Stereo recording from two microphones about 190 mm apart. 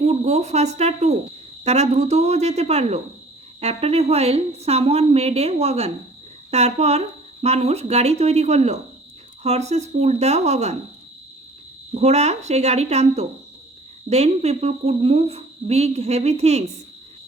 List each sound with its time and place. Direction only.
0.0 s speech: 35° right (ahead or behind)
11.9 s speech: 35° right (ahead or behind)